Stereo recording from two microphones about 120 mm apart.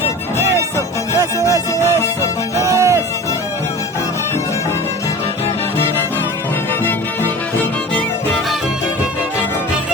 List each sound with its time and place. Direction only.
1.4 s music: 25° left (ahead or behind)
2.6 s music: 25° right (ahead or behind)